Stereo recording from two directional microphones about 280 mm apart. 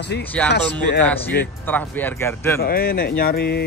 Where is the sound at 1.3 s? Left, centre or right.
Left.